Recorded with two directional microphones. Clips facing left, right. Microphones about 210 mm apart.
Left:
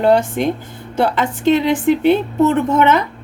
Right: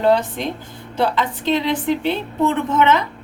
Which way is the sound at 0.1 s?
50° left (ahead or behind).